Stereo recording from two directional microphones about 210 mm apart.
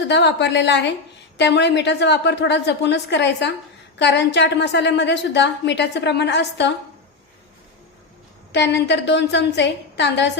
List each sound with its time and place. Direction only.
0.1 s a woman's voice: 55° left (ahead or behind)
8.5 s a woman's voice: 55° left (ahead or behind)